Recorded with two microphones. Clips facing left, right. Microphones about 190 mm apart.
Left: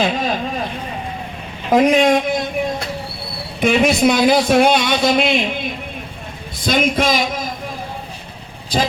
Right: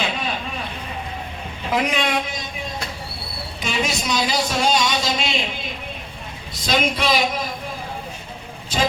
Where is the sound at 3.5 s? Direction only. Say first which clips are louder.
Left 11 dB; 60° left (ahead or behind).